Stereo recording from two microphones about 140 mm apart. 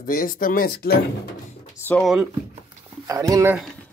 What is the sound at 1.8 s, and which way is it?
Speech, 5° left (ahead or behind).